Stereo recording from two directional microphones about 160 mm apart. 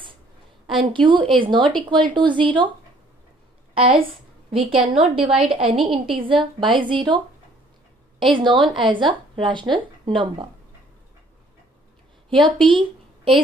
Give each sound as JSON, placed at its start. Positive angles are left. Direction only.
{"t": 0.7, "sound": "speech", "side_deg": -30}
{"t": 3.7, "sound": "a woman's voice", "side_deg": -35}
{"t": 8.2, "sound": "speech", "side_deg": -30}
{"t": 12.4, "sound": "speech", "side_deg": -30}